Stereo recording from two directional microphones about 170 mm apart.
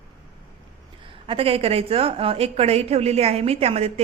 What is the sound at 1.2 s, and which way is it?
A woman's voice, 35° right (ahead or behind).